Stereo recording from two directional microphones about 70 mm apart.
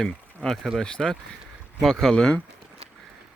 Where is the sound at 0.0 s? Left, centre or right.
Centre.